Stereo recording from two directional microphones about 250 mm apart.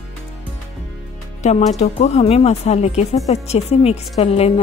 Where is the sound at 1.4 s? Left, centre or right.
Left.